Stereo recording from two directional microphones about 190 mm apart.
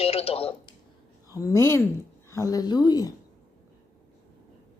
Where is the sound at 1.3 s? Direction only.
15° left (ahead or behind).